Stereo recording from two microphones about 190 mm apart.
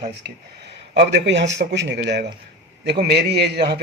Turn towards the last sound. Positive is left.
turn(degrees=-60)  # may be behind; listen again after turning